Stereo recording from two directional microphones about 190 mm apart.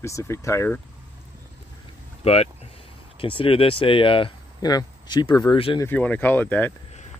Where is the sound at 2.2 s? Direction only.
35° left (ahead or behind).